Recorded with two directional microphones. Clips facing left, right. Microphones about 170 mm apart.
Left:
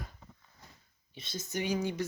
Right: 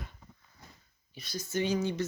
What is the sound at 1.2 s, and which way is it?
Speech, 25° left (ahead or behind).